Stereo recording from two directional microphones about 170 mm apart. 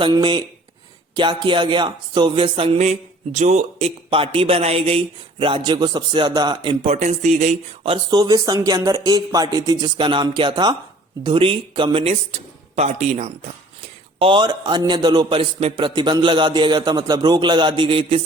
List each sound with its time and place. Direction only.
0.0 s a man's voice: 30° right (ahead or behind); by 7.5 s 45° right (ahead or behind)
7.9 s a man's voice: 25° right (ahead or behind); by 13.3 s 40° right (ahead or behind)
14.2 s a man's voice: 30° right (ahead or behind)